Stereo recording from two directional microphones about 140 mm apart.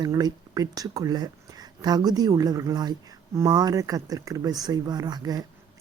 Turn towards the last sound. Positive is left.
turn(degrees=-25)  # may be behind; listen again after turning